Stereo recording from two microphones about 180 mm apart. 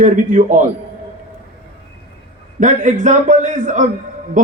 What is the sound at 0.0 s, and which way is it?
Speech, 45° right (ahead or behind).